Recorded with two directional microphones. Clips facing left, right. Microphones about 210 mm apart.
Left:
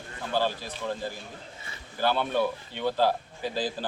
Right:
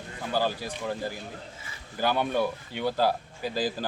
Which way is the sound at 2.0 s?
15° right (ahead or behind).